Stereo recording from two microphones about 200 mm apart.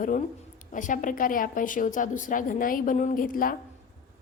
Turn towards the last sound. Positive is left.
turn(degrees=45)  # may be behind; listen again after turning